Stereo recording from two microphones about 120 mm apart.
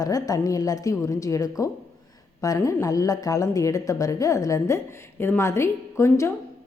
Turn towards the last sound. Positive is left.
turn(degrees=25)  # may be behind; listen again after turning